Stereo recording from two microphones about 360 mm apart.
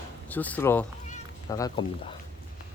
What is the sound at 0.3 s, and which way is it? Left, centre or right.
Speech, centre.